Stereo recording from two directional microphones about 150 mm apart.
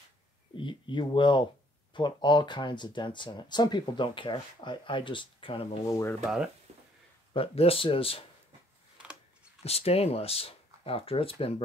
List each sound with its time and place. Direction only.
0.6 s speech: 35° left (ahead or behind)
5.9 s speech: 20° left (ahead or behind)
6.2 s speech: 5° right (ahead or behind)
7.3 s speech: 40° left (ahead or behind)
8.9 s a sound: 5° right (ahead or behind)
9.6 s speech: 40° left (ahead or behind)